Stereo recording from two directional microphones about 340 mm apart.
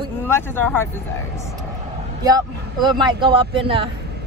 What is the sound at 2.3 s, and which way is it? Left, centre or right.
A man's voice, centre.